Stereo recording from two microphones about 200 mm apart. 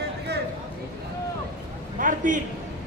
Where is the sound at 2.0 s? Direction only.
40° right (ahead or behind).